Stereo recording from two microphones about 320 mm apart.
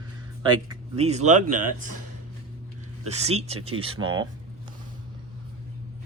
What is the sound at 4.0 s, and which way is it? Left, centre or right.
Speech, right.